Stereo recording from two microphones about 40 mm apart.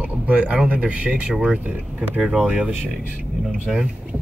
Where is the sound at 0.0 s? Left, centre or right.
Right.